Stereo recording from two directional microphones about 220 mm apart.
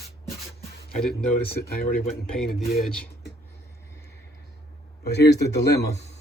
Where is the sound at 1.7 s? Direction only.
40° left (ahead or behind).